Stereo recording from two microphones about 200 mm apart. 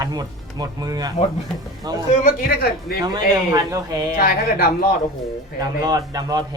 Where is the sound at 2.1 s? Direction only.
45° left (ahead or behind).